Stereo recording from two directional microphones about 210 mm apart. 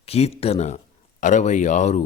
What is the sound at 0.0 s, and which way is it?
Speech, 30° left (ahead or behind).